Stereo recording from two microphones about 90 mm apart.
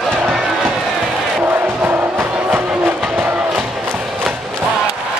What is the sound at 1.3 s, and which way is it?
Music, 20° right (ahead or behind).